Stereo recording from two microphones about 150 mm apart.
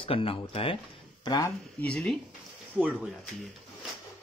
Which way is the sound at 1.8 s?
5° left (ahead or behind).